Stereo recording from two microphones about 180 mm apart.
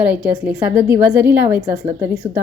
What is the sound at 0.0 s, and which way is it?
A woman's voice, 5° right (ahead or behind).